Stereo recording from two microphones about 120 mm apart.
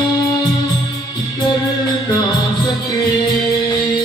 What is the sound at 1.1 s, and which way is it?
Music, 35° left (ahead or behind).